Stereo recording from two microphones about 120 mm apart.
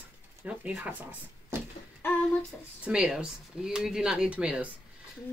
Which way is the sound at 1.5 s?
20° right (ahead or behind).